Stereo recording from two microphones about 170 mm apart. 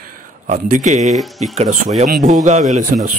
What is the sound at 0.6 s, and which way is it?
Speech, 50° right (ahead or behind).